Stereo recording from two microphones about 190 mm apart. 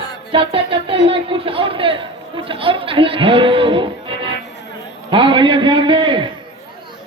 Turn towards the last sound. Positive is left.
turn(degrees=-25)  # may be behind; listen again after turning